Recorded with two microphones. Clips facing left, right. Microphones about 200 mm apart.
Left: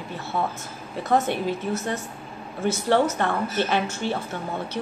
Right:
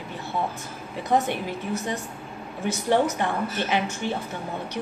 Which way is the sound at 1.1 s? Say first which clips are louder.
Left 2 dB; 15° right (ahead or behind).